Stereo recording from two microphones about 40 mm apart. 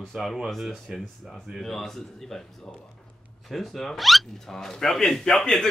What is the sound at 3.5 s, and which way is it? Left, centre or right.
Speech, centre.